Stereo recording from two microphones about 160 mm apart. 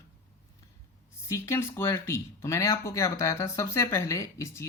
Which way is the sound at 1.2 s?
15° left (ahead or behind).